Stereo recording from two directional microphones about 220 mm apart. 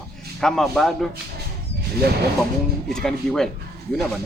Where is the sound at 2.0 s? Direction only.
45° right (ahead or behind).